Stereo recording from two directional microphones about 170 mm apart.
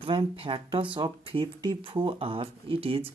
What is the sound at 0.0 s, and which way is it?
Speech, 30° right (ahead or behind).